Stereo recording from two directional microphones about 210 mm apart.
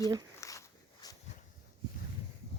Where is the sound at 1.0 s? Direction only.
20° left (ahead or behind).